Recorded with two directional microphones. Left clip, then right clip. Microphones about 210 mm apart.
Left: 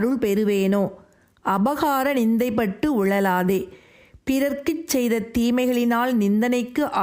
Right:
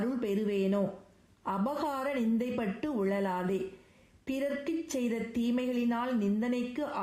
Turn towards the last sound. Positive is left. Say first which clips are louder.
# left 11 dB
turn(degrees=50)  # may be behind; listen again after turning